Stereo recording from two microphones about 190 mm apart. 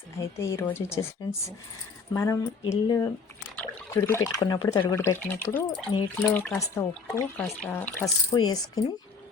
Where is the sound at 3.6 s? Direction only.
10° left (ahead or behind).